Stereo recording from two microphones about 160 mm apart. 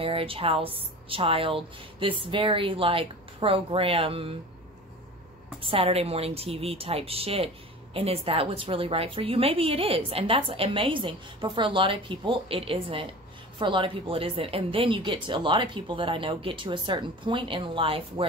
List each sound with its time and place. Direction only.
0.0 s a woman's voice: 35° right (ahead or behind)
5.6 s a woman's voice: 35° right (ahead or behind)